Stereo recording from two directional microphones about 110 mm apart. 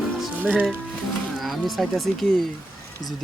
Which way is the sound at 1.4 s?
Centre (ahead or behind).